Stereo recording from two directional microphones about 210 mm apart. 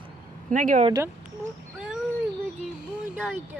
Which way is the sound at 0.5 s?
35° right (ahead or behind).